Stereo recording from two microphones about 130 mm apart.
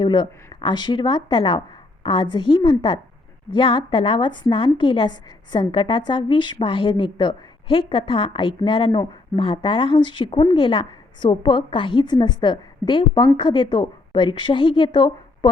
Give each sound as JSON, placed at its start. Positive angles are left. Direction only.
{"t": 0.0, "sound": "a woman's voice", "side_deg": 35}